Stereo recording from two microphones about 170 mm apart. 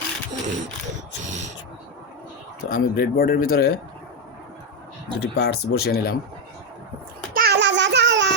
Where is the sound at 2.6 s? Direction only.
60° left (ahead or behind).